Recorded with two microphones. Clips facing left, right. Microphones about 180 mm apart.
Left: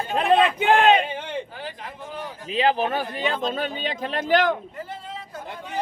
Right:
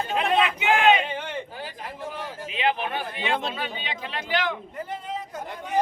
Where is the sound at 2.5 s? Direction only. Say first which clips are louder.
Left 5 dB; 35° left (ahead or behind).